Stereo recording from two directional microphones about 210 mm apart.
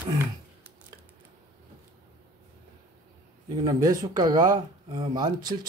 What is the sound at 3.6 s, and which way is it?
Speech, 15° right (ahead or behind).